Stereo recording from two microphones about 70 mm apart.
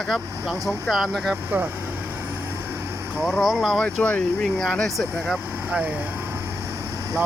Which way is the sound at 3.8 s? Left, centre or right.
Centre.